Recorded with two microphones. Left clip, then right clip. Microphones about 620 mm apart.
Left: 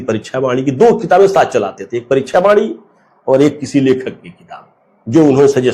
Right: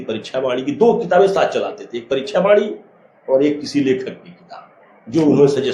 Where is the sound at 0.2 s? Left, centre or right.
Left.